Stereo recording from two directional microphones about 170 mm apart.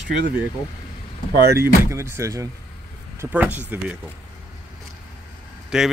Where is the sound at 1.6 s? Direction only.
15° right (ahead or behind).